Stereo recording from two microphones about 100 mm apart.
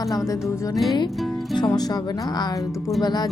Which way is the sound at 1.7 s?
40° left (ahead or behind).